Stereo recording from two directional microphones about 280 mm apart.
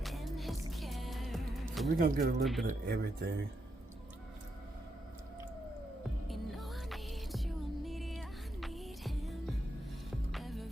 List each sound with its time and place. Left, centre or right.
0.0 s music: centre
2.0 s speech: right
2.4 s speech: centre
2.6 s speech: right
6.2 s music: centre